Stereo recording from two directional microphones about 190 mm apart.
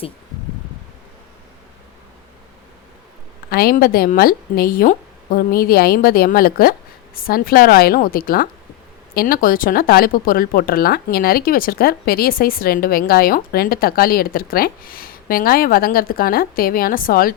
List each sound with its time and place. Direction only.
3.5 s speech: 50° left (ahead or behind)